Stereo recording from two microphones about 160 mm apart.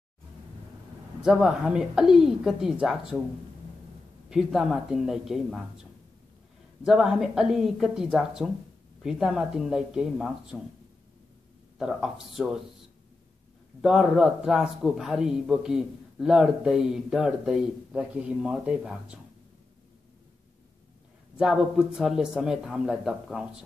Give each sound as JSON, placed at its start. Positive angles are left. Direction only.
{"t": 1.2, "sound": "a man's voice", "side_deg": -5}
{"t": 4.3, "sound": "a man's voice", "side_deg": 0}
{"t": 6.8, "sound": "a man's voice", "side_deg": -5}
{"t": 11.8, "sound": "a man's voice", "side_deg": -5}
{"t": 13.7, "sound": "a man's voice", "side_deg": -5}
{"t": 21.4, "sound": "a man's voice", "side_deg": -5}